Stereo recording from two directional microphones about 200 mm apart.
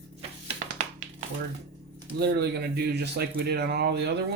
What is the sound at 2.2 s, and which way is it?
Speech, 55° right (ahead or behind).